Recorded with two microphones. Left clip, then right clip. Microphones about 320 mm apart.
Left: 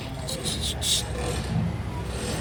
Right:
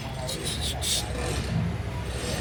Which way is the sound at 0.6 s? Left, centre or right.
Centre.